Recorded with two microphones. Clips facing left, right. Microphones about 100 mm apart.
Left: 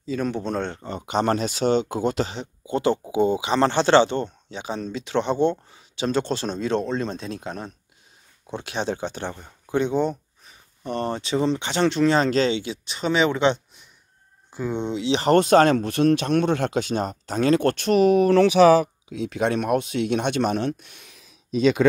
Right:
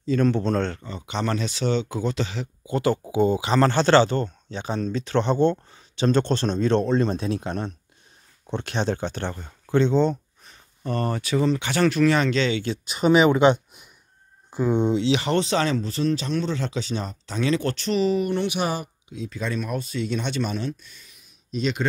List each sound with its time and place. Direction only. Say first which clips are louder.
0.0 s a man's voice: right 4 dB; 5° left (ahead or behind)
0.8 s speech: left 5 dB; 45° left (ahead or behind)
2.6 s a man's voice: left 1 dB; 25° left (ahead or behind)
12.8 s speech: right 5 dB; 10° right (ahead or behind)
15.2 s speech: left 7 dB; 50° left (ahead or behind)
18.6 s speech: left 12 dB; 90° left; by 21.2 s 65° left (ahead or behind)